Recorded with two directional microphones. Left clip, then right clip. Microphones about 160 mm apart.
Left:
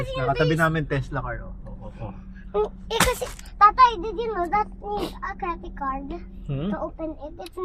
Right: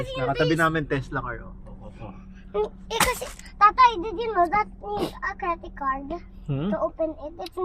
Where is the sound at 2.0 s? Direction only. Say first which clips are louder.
Left 3 dB; 10° left (ahead or behind).